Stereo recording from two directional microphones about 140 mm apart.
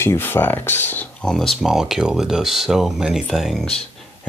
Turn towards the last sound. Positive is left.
turn(degrees=0)  # may be behind; listen again after turning